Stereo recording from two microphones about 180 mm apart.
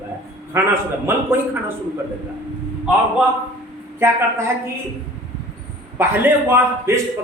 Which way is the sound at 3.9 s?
15° right (ahead or behind).